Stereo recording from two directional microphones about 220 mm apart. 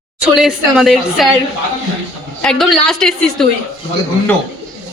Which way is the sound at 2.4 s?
Centre (ahead or behind).